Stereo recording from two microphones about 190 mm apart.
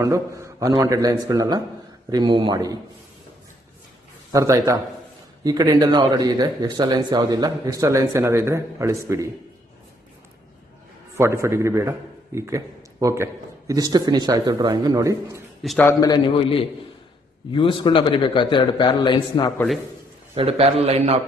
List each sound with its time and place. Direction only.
0.0 s a man's voice: 15° right (ahead or behind)
4.3 s a man's voice: 15° right (ahead or behind)
11.1 s a man's voice: 15° right (ahead or behind)
15.6 s a man's voice: centre (ahead or behind)
15.9 s a man's voice: 20° left (ahead or behind)
20.3 s a man's voice: 30° right (ahead or behind)